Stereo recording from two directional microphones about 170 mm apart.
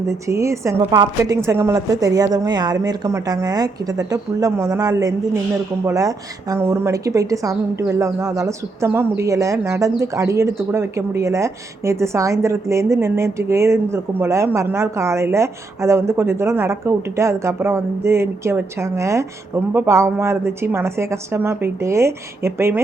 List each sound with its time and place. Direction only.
0.1 s a woman's voice: 15° right (ahead or behind)